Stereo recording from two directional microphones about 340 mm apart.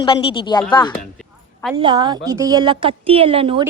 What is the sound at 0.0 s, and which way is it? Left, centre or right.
Speech, centre.